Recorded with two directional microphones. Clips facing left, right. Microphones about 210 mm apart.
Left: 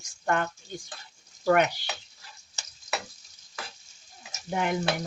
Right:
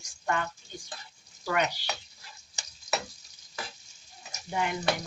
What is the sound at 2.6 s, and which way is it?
Frying, 15° right (ahead or behind).